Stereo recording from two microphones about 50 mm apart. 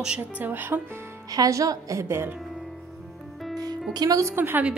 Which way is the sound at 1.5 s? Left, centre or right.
Right.